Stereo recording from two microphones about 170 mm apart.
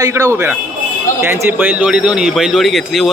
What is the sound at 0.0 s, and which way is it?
A man's voice, 20° right (ahead or behind).